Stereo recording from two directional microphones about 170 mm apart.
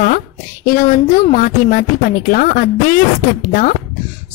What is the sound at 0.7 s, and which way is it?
A woman's voice, 50° left (ahead or behind).